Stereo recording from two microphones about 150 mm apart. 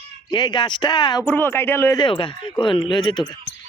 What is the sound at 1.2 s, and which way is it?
Speech, 10° left (ahead or behind).